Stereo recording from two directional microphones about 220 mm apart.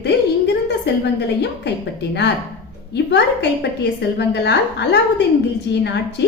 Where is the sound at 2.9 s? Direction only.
50° left (ahead or behind).